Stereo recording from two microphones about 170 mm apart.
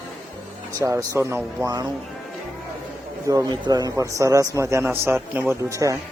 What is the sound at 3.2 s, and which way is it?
A man's voice, 20° right (ahead or behind).